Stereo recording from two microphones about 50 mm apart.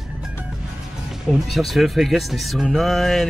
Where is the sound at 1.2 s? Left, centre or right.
Centre.